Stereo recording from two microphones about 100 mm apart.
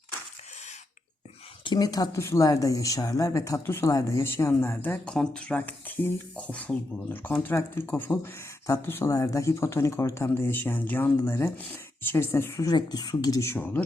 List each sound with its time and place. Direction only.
1.6 s speech: 45° left (ahead or behind)
4.2 s speech: 25° left (ahead or behind)
5.1 s speech: 10° left (ahead or behind); by 12.6 s 25° left (ahead or behind)
12.6 s speech: 45° left (ahead or behind)
13.5 s speech: 15° left (ahead or behind)